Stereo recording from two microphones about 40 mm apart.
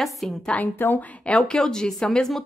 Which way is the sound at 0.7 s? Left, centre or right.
Left.